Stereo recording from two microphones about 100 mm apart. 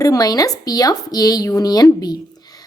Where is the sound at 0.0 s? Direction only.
35° left (ahead or behind).